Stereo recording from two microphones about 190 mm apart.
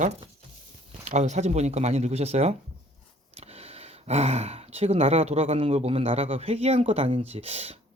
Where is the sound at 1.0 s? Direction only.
40° right (ahead or behind).